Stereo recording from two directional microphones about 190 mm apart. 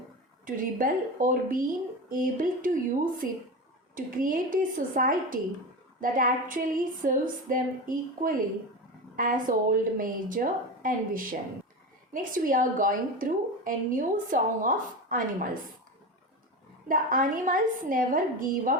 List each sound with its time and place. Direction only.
0.4 s a woman's voice: 45° right (ahead or behind)
16.9 s a woman's voice: 45° right (ahead or behind)